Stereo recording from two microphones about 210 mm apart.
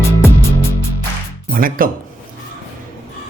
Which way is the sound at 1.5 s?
40° right (ahead or behind).